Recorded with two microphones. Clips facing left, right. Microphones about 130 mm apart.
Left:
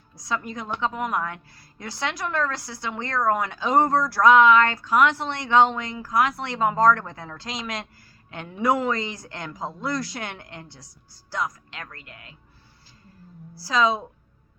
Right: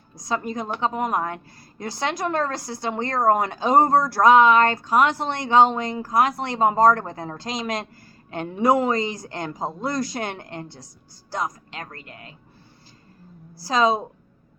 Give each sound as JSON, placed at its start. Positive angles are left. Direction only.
{"t": 0.1, "sound": "speech", "side_deg": -45}
{"t": 13.5, "sound": "a woman's voice", "side_deg": -50}